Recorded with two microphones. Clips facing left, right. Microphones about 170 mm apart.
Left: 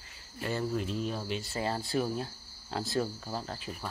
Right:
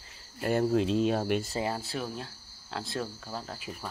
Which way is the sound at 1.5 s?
15° right (ahead or behind).